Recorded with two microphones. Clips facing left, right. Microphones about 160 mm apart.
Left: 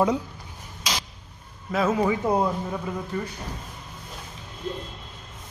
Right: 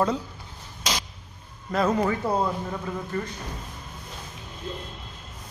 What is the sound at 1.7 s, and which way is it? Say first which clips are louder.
Speech: left 1 dB; 5° left (ahead or behind).